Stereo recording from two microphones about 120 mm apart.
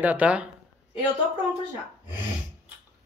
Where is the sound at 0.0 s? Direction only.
10° right (ahead or behind).